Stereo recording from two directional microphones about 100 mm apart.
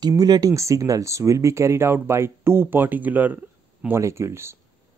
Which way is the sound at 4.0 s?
30° right (ahead or behind).